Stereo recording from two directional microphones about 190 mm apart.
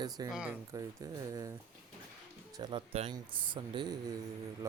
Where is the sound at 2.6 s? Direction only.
25° right (ahead or behind).